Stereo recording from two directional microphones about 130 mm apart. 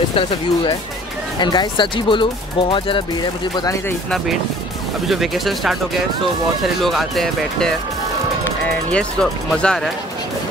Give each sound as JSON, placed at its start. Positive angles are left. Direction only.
{"t": 0.1, "sound": "speech", "side_deg": 40}
{"t": 5.0, "sound": "speech", "side_deg": 0}
{"t": 6.8, "sound": "speech", "side_deg": 0}
{"t": 8.9, "sound": "speech", "side_deg": 5}